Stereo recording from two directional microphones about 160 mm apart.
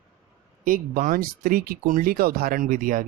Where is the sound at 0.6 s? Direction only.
60° right (ahead or behind).